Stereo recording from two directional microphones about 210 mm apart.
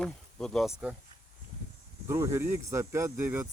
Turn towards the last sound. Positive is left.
turn(degrees=-10)  # may be behind; listen again after turning